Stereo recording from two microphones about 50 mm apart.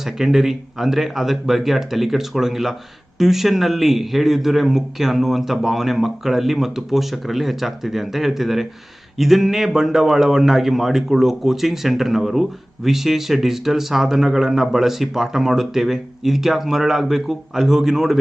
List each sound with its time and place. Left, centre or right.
0.0 s a man's voice: centre